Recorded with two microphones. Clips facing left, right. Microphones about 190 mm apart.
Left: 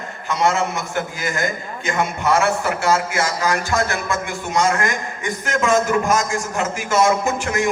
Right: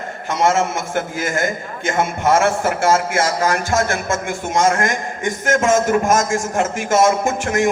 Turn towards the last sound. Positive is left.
turn(degrees=-50)  # may be behind; listen again after turning